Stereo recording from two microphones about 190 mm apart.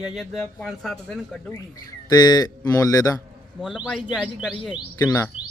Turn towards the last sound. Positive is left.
turn(degrees=15)  # may be behind; listen again after turning